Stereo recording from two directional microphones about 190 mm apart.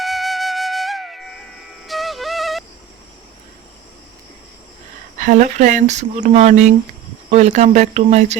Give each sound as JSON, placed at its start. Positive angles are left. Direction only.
{"t": 0.0, "sound": "flute", "side_deg": 0}
{"t": 1.9, "sound": "music", "side_deg": 0}
{"t": 5.1, "sound": "speech", "side_deg": -40}